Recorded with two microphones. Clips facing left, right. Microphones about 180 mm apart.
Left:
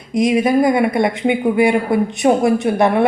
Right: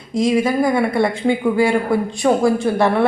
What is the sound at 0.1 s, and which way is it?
A man's voice, 20° left (ahead or behind).